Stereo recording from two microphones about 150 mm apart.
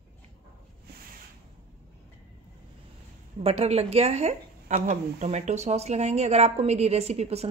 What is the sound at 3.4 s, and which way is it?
Speech, 40° right (ahead or behind).